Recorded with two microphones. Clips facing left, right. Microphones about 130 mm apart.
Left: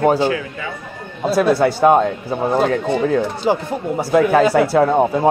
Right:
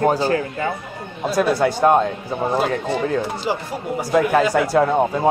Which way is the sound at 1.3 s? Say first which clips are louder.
Left 3 dB; centre (ahead or behind).